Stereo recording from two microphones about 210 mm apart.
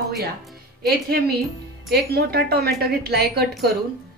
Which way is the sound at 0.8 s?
50° right (ahead or behind).